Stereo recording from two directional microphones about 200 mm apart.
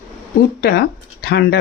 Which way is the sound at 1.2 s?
55° left (ahead or behind).